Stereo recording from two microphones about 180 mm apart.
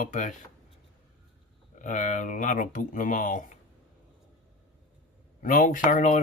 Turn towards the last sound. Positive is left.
turn(degrees=40)  # may be behind; listen again after turning